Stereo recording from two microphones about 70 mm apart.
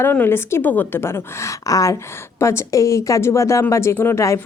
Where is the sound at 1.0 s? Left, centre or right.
Left.